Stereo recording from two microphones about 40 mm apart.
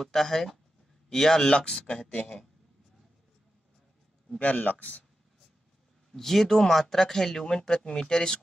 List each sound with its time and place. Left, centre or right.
0.0 s a man's voice: centre; by 2.3 s left
4.4 s speech: left
6.1 s speech: centre